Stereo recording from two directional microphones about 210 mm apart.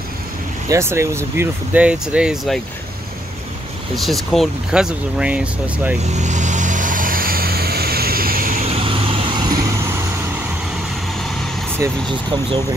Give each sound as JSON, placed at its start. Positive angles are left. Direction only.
{"t": 0.7, "sound": "speech", "side_deg": -15}
{"t": 3.9, "sound": "speech", "side_deg": 0}
{"t": 6.1, "sound": "vehicle", "side_deg": -35}
{"t": 8.6, "sound": "vehicle", "side_deg": -25}
{"t": 11.8, "sound": "speech", "side_deg": -20}